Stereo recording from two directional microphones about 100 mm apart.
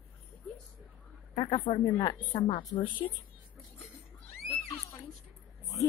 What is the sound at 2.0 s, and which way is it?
Speech, 45° left (ahead or behind).